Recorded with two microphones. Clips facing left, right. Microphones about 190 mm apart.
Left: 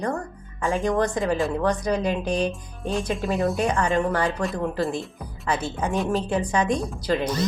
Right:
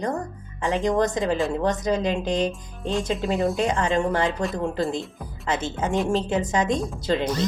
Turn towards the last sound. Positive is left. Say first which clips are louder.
# even
turn(degrees=-25)  # may be behind; listen again after turning